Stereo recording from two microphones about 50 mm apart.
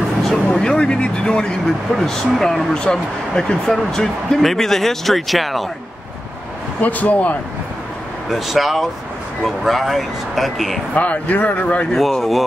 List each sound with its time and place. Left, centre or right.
0.3 s speech: centre
6.8 s speech: left
8.3 s speech: centre
11.0 s speech: left
11.9 s speech: centre